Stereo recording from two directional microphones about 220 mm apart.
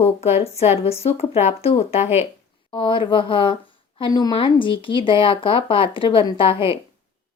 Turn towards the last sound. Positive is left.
turn(degrees=25)  # may be behind; listen again after turning